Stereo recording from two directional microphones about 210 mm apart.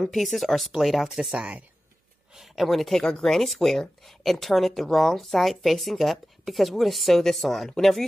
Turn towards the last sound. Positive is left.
turn(degrees=0)  # may be behind; listen again after turning